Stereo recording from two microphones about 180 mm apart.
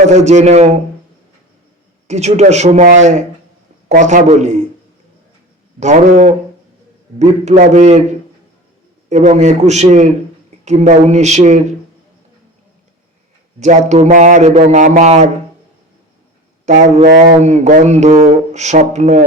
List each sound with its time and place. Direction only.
0.1 s speech: 40° right (ahead or behind)
2.0 s speech: 40° right (ahead or behind)
5.8 s speech: 40° right (ahead or behind)
9.0 s speech: 40° right (ahead or behind)
13.6 s speech: 40° right (ahead or behind)
16.6 s speech: 45° right (ahead or behind)